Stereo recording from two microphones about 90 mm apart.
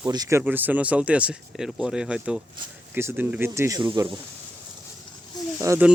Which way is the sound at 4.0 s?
45° right (ahead or behind).